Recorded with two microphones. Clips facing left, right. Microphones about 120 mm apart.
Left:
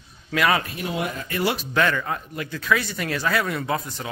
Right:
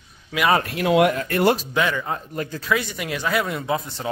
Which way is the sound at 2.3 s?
35° right (ahead or behind).